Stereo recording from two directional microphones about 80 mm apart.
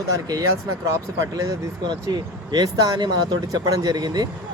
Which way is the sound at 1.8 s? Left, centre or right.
Right.